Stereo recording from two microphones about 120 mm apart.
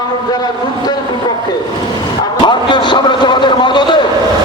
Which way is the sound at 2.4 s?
40° left (ahead or behind).